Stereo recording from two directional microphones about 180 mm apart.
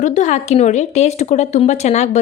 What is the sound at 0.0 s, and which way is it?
A woman's voice, 40° left (ahead or behind).